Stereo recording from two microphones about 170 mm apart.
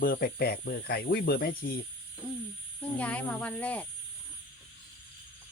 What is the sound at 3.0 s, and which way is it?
Speech, 10° left (ahead or behind).